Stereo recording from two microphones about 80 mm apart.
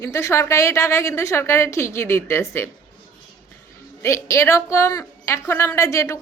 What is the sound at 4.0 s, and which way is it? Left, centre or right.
A woman's voice, left.